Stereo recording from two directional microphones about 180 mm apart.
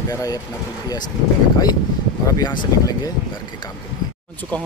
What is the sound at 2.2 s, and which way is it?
Speech, 20° left (ahead or behind).